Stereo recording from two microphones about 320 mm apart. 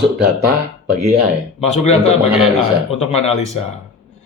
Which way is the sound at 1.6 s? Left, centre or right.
Centre.